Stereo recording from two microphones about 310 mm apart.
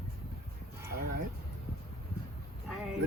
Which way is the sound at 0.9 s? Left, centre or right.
Right.